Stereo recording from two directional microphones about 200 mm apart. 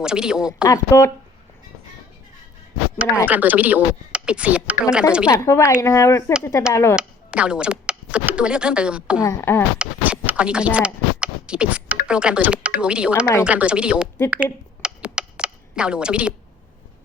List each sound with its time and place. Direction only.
0.0 s speech: 5° right (ahead or behind)
0.6 s speech: 15° left (ahead or behind)
3.2 s speech: 10° right (ahead or behind)
5.3 s speech: 15° left (ahead or behind)
6.9 s speech: 5° right (ahead or behind)
9.2 s speech: 15° left (ahead or behind)
9.7 s speech: 5° right (ahead or behind)
14.3 s a sound: 5° right (ahead or behind)